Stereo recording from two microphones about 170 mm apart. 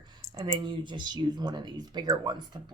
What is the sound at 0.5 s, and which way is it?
Speech, 30° right (ahead or behind).